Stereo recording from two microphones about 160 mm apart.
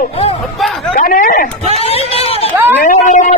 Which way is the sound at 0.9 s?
60° left (ahead or behind).